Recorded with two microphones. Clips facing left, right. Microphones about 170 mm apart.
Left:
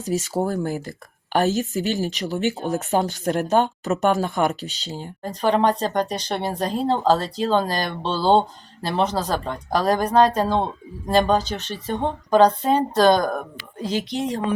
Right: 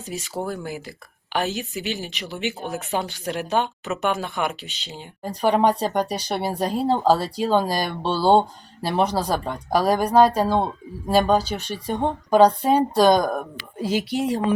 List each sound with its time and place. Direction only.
0.0 s speech: 40° left (ahead or behind)
5.2 s speech: 10° right (ahead or behind)